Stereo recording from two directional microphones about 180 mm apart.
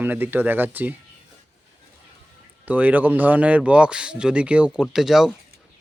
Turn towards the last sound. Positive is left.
turn(degrees=0)  # may be behind; listen again after turning